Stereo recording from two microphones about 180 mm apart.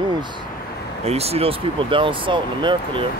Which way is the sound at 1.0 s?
35° right (ahead or behind).